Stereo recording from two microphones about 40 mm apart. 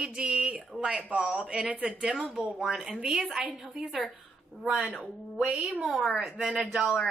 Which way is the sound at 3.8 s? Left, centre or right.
Centre.